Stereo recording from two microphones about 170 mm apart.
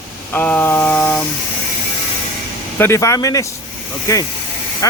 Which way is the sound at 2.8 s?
15° left (ahead or behind).